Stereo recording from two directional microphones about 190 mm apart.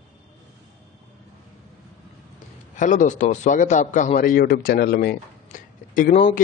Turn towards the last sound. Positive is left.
turn(degrees=40)  # may be behind; listen again after turning